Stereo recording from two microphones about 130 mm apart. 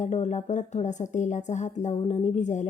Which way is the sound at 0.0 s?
60° left (ahead or behind).